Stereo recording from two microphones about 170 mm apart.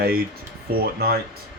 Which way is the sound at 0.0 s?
65° right (ahead or behind).